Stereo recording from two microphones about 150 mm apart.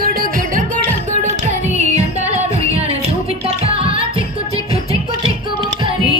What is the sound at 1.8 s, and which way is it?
Music, 50° right (ahead or behind).